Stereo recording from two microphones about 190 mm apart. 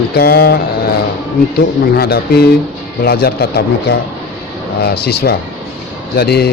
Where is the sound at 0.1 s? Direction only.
55° left (ahead or behind).